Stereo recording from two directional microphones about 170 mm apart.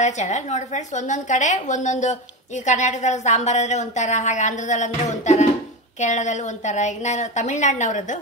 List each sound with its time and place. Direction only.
0.0 s a woman's voice: 45° left (ahead or behind)